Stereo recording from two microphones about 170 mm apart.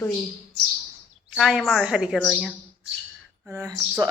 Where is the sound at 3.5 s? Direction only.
15° right (ahead or behind).